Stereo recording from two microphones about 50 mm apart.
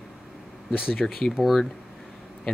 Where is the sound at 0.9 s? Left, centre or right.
Centre.